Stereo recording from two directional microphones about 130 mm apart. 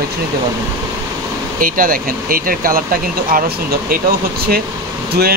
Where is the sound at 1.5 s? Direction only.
90° right.